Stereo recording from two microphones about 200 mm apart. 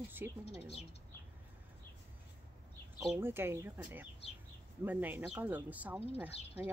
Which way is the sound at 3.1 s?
10° right (ahead or behind).